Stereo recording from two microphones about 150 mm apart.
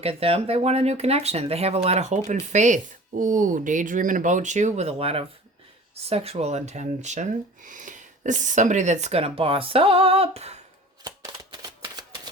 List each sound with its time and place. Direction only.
0.0 s speech: 40° right (ahead or behind)
11.6 s typewriter: 25° right (ahead or behind)